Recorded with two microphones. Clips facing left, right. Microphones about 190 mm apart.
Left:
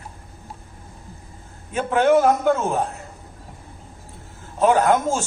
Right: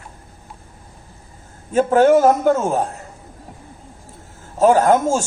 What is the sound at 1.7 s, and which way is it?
Speech, 40° right (ahead or behind).